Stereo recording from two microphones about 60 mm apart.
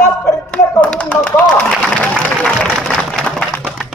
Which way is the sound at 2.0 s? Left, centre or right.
Left.